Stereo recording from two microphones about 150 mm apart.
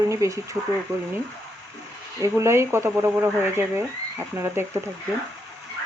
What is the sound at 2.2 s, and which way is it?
Speech, 20° right (ahead or behind).